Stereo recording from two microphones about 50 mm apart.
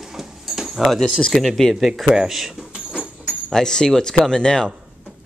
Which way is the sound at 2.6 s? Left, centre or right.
Centre.